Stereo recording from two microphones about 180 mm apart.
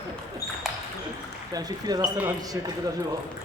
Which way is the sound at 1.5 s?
20° right (ahead or behind).